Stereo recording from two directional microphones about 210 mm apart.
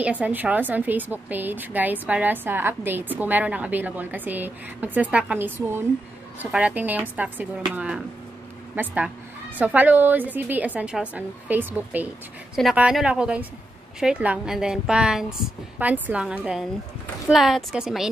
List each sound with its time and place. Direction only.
0.0 s a woman's voice: 5° right (ahead or behind)